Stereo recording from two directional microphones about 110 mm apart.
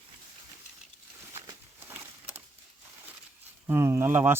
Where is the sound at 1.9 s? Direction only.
20° right (ahead or behind).